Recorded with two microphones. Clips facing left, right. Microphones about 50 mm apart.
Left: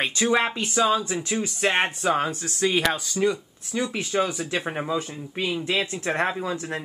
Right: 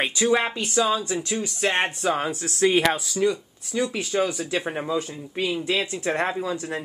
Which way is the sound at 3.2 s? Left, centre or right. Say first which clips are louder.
Right 1 dB; centre.